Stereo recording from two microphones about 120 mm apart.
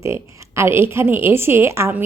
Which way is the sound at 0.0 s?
25° right (ahead or behind).